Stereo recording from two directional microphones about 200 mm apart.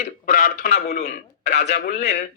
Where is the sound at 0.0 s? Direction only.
45° left (ahead or behind).